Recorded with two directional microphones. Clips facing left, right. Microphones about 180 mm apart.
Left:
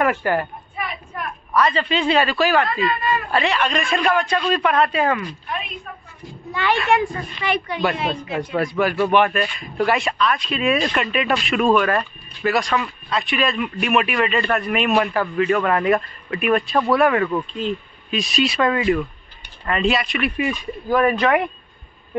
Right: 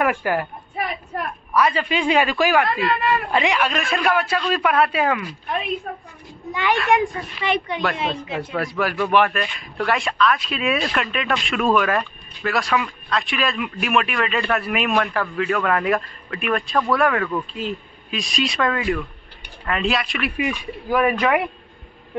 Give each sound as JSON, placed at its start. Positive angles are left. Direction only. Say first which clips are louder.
{"t": 0.0, "sound": "a woman's voice", "louder": "left 1 dB", "side_deg": -5}
{"t": 1.5, "sound": "a man's voice", "louder": "left 1 dB", "side_deg": -10}
{"t": 2.8, "sound": "speech", "louder": "right 1 dB", "side_deg": -65}
{"t": 3.3, "sound": "a man's voice", "louder": "even", "side_deg": -15}
{"t": 5.9, "sound": "a sound", "louder": "right 6 dB", "side_deg": -40}
{"t": 6.5, "sound": "a man's voice", "louder": "even", "side_deg": -15}
{"t": 8.5, "sound": "speech", "louder": "left 4 dB", "side_deg": 0}
{"t": 17.5, "sound": "speech", "louder": "left 3 dB", "side_deg": -5}